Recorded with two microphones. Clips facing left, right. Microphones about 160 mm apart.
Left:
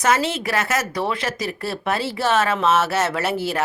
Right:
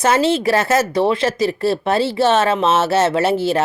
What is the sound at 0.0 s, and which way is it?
Speech, 30° right (ahead or behind).